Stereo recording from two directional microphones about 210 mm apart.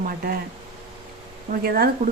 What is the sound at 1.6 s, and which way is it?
Speech, 45° right (ahead or behind).